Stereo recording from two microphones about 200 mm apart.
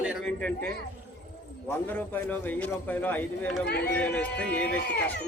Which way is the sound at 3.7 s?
55° left (ahead or behind).